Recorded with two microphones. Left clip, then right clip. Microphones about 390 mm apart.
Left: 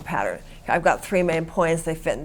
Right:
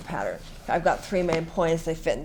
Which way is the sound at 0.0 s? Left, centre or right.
Left.